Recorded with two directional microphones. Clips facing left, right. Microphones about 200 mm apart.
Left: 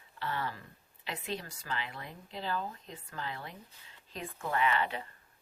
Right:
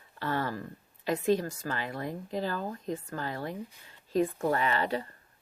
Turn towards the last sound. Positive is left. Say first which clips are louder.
# right 2 dB
turn(degrees=-40)  # may be behind; listen again after turning